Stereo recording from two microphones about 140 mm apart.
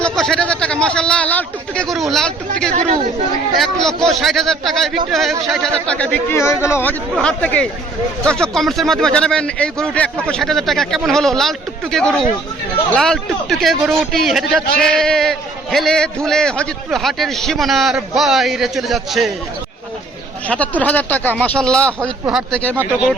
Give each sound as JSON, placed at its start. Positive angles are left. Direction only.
{"t": 0.0, "sound": "speech", "side_deg": 5}
{"t": 2.7, "sound": "speech", "side_deg": -50}
{"t": 3.6, "sound": "a man's voice", "side_deg": 5}
{"t": 7.2, "sound": "a man's voice", "side_deg": 10}
{"t": 20.5, "sound": "speech", "side_deg": 10}
{"t": 22.3, "sound": "a man's voice", "side_deg": -5}